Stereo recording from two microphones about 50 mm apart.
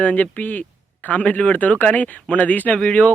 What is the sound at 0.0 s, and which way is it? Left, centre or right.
Speech, left.